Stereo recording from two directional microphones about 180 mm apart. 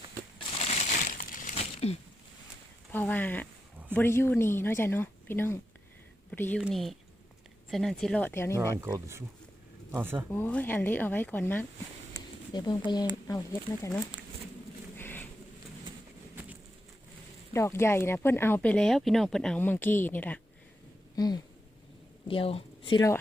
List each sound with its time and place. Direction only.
0.3 s crushing: 35° left (ahead or behind)
2.9 s speech: 10° left (ahead or behind)
6.6 s speech: centre (ahead or behind)
8.8 s speech: 15° right (ahead or behind)
10.3 s speech: 10° left (ahead or behind)
12.5 s speech: 25° left (ahead or behind)
14.9 s a sound: 10° left (ahead or behind)
17.5 s speech: 15° left (ahead or behind)
21.2 s a woman's voice: 20° left (ahead or behind)
23.0 s speech: 15° left (ahead or behind)